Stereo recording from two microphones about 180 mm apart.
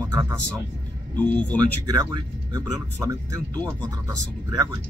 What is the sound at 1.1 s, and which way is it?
Speech, 10° left (ahead or behind).